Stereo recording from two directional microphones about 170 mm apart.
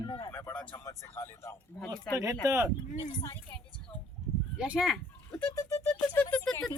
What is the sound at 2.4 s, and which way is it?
Speech, 15° right (ahead or behind).